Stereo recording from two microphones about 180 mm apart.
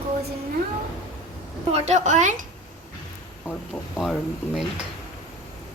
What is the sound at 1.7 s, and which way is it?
Speech, 40° right (ahead or behind).